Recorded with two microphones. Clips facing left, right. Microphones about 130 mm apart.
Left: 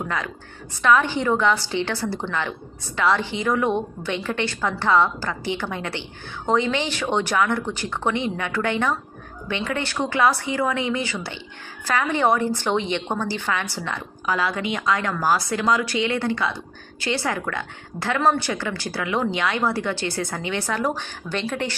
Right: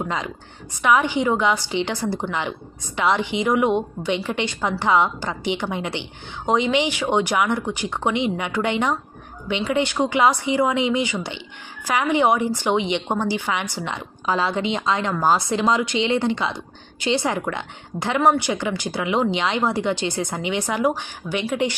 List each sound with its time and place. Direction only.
0.0 s a woman's voice: 20° right (ahead or behind)